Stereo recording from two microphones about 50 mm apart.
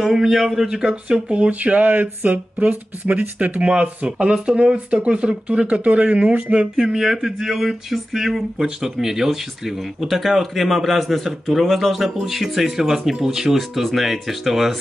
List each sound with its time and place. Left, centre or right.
0.0 s speech: centre
0.7 s speech: centre
6.8 s speech: centre